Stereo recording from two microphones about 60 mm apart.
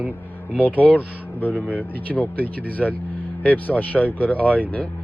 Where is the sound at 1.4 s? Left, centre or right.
Left.